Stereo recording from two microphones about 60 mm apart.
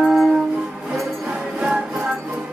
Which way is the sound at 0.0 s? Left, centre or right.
Centre.